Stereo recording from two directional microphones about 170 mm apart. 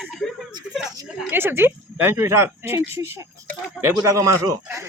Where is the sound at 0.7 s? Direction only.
5° right (ahead or behind).